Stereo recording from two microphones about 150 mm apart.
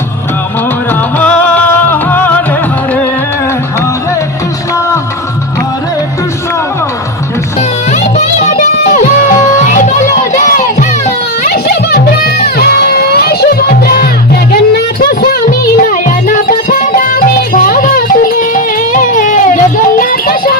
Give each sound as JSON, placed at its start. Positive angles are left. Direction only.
{"t": 1.2, "sound": "music", "side_deg": 10}
{"t": 7.9, "sound": "music", "side_deg": 50}
{"t": 11.4, "sound": "music", "side_deg": 85}
{"t": 15.9, "sound": "music", "side_deg": 65}